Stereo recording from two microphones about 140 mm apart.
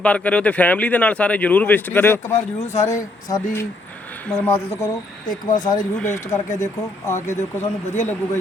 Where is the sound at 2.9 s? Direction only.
25° left (ahead or behind).